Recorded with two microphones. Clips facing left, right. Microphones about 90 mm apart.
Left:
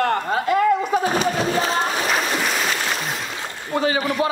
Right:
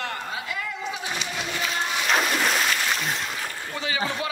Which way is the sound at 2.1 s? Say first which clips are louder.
Left 1 dB; centre (ahead or behind).